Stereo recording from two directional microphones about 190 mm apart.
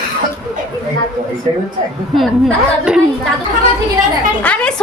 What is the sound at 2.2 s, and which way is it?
Speech, centre (ahead or behind).